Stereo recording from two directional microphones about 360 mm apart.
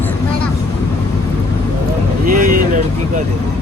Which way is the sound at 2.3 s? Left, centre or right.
Right.